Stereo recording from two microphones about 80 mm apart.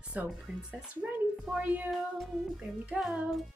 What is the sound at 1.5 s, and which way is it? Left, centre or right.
Speech, centre.